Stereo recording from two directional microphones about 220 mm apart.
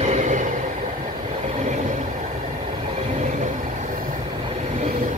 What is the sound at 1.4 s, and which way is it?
Vehicle, 30° right (ahead or behind).